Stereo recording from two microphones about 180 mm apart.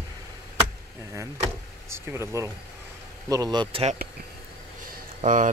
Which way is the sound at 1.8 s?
15° right (ahead or behind).